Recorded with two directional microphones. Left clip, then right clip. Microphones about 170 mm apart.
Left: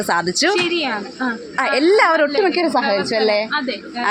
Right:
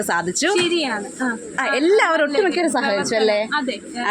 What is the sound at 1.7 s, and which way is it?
Speech, 25° left (ahead or behind).